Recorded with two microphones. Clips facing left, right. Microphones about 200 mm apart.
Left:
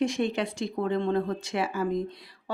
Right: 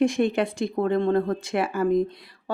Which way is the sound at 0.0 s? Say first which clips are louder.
Right 5 dB; 55° right (ahead or behind).